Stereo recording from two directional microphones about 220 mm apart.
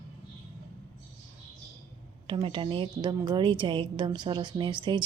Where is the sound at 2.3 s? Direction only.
25° right (ahead or behind).